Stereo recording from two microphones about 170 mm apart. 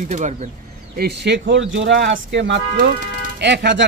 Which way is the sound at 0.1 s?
45° right (ahead or behind).